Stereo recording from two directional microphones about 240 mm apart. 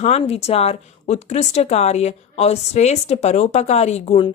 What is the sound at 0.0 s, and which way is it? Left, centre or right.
Speech, left.